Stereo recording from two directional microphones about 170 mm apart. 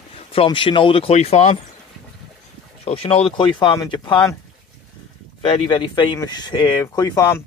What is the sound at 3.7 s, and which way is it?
Speech, 20° left (ahead or behind).